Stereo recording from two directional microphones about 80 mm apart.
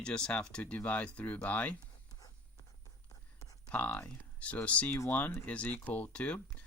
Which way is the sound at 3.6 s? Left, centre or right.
Centre.